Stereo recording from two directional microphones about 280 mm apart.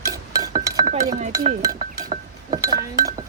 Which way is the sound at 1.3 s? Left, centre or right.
Centre.